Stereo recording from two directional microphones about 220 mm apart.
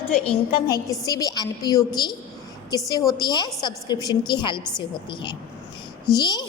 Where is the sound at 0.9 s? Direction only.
15° left (ahead or behind).